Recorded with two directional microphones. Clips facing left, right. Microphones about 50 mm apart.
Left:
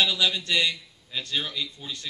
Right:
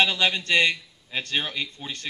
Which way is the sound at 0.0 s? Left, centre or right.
Right.